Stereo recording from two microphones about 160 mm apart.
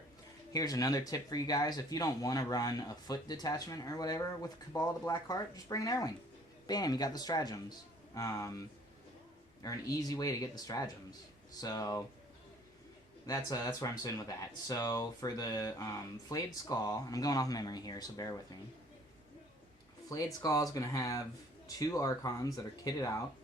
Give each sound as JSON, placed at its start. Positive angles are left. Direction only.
{"t": 0.5, "sound": "speech", "side_deg": 25}
{"t": 9.6, "sound": "speech", "side_deg": 20}
{"t": 13.2, "sound": "speech", "side_deg": 20}
{"t": 20.1, "sound": "speech", "side_deg": 20}